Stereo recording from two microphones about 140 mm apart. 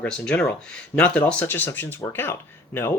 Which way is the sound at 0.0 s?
10° left (ahead or behind).